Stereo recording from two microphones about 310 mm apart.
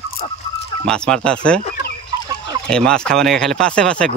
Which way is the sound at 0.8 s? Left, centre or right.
Centre.